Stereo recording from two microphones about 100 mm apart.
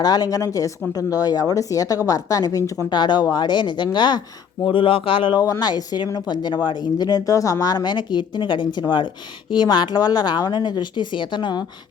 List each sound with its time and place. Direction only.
0.0 s speech: 40° left (ahead or behind)
2.9 s speech: 50° left (ahead or behind)
4.6 s speech: 60° left (ahead or behind)
5.4 s speech: 40° left (ahead or behind)